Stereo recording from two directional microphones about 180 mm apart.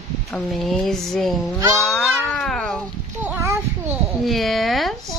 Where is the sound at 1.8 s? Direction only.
5° left (ahead or behind).